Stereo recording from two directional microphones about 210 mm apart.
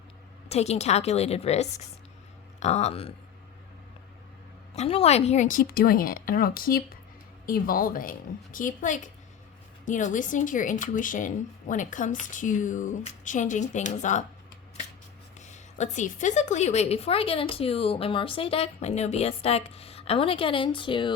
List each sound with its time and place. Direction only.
0.4 s speech: 30° left (ahead or behind)
4.7 s a woman's voice: 30° left (ahead or behind)
15.4 s a woman's voice: 35° left (ahead or behind)